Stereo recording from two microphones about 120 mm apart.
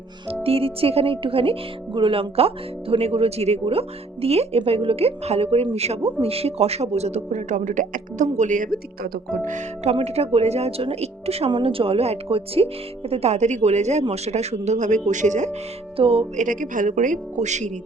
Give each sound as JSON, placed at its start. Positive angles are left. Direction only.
{"t": 0.4, "sound": "speech", "side_deg": -55}
{"t": 9.9, "sound": "speech", "side_deg": -60}
{"t": 16.0, "sound": "music", "side_deg": -55}
{"t": 16.4, "sound": "speech", "side_deg": -90}